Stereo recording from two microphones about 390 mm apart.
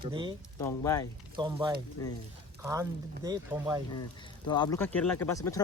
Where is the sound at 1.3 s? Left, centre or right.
Centre.